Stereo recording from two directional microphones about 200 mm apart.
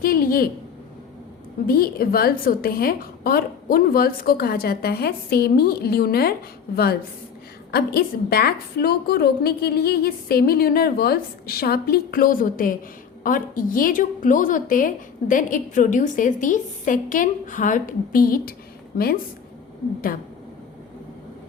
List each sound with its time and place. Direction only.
0.0 s a sound: 45° left (ahead or behind)
1.6 s a woman's voice: 50° left (ahead or behind)
7.7 s a woman's voice: 50° left (ahead or behind)